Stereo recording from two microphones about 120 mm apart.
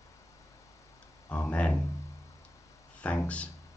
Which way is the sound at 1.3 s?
10° left (ahead or behind).